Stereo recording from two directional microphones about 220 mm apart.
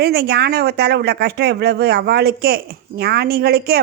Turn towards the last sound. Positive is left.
turn(degrees=-45)  # may be behind; listen again after turning